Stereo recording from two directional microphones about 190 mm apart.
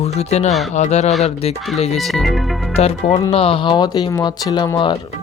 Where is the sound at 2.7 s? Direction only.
30° left (ahead or behind).